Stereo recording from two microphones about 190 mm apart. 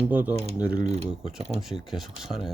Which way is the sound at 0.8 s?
35° right (ahead or behind).